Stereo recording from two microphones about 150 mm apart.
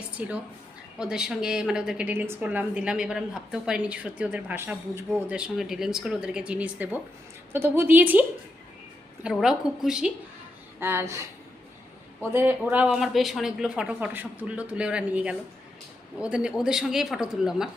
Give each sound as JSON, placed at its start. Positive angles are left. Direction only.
{"t": 0.2, "sound": "a woman's voice", "side_deg": -10}
{"t": 9.2, "sound": "speech", "side_deg": -5}
{"t": 10.8, "sound": "a woman's voice", "side_deg": -15}